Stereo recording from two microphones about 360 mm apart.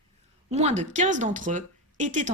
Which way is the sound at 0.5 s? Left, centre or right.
Centre.